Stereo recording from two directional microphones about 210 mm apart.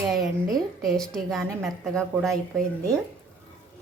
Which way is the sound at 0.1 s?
Centre (ahead or behind).